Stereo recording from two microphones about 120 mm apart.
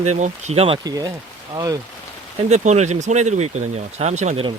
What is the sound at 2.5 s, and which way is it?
Speech, 75° right (ahead or behind).